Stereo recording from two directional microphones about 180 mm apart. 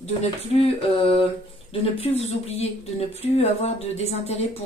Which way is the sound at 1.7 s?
35° left (ahead or behind).